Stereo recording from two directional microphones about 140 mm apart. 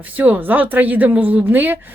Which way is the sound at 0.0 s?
10° right (ahead or behind).